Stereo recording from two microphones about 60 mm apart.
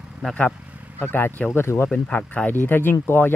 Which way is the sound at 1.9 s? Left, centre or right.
Centre.